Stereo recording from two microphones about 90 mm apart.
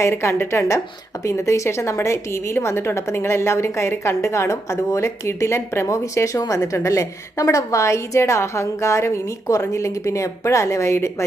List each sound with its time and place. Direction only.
0.0 s a woman's voice: 30° left (ahead or behind)